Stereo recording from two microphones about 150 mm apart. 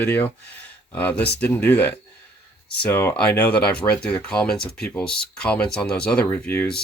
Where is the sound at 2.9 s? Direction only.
15° left (ahead or behind).